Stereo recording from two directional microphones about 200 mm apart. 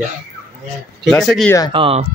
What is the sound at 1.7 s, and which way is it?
Speech, 30° right (ahead or behind).